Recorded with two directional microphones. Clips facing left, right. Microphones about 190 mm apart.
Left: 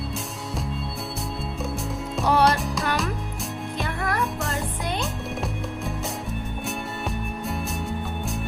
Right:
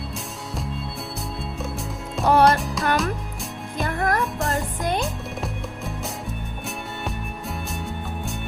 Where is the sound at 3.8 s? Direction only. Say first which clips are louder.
Right 5 dB; 45° right (ahead or behind).